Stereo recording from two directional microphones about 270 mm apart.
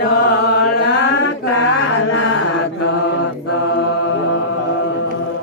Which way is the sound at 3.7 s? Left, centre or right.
Left.